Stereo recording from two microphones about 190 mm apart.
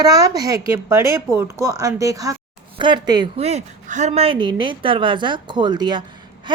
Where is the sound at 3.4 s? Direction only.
35° right (ahead or behind).